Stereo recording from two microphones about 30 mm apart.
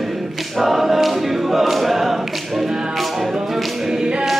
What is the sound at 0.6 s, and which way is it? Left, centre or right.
Choir, centre.